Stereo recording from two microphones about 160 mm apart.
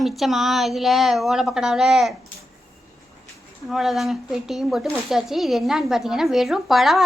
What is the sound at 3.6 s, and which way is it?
A woman's voice, centre (ahead or behind).